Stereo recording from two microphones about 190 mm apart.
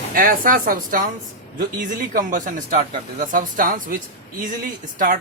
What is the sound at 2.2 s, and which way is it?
A man's voice, 45° right (ahead or behind).